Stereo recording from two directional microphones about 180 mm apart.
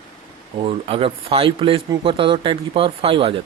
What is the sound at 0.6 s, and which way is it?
Speech, 30° right (ahead or behind).